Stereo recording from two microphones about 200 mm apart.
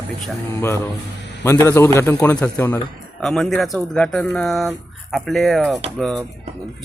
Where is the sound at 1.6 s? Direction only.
10° left (ahead or behind).